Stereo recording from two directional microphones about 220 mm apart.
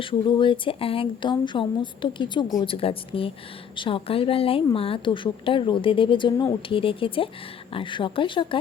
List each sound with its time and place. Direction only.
0.0 s a woman's voice: 25° left (ahead or behind)